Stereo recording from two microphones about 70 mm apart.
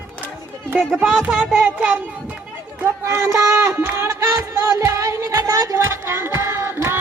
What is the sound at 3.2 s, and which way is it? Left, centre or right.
Music, right.